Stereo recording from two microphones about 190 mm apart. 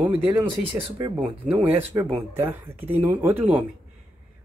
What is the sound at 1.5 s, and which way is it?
Speech, 10° right (ahead or behind).